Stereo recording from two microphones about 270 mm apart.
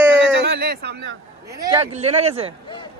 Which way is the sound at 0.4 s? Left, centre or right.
Right.